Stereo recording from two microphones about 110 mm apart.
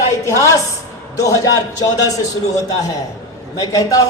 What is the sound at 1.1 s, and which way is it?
A man's voice, 30° left (ahead or behind).